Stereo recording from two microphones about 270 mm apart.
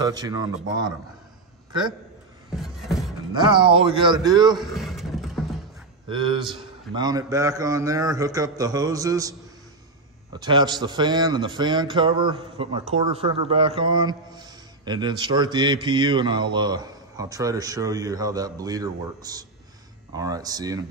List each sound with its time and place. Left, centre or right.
0.0 s speech: centre
2.6 s beatboxing: centre
3.3 s speech: centre
4.6 s a sound: centre
6.0 s speech: centre
10.3 s speech: centre